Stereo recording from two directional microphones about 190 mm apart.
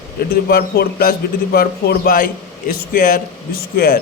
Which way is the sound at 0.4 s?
55° left (ahead or behind).